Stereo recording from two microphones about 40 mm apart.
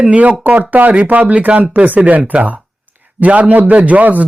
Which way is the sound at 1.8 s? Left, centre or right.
Right.